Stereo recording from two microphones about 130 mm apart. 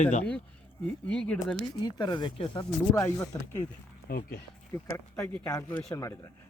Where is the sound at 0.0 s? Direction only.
65° left (ahead or behind).